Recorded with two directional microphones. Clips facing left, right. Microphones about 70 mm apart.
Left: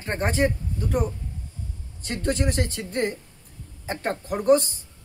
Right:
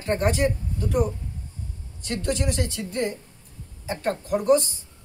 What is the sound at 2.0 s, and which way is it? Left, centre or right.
Speech, left.